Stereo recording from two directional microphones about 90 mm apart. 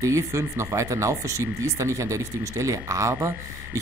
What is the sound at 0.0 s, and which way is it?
Speech, 35° right (ahead or behind).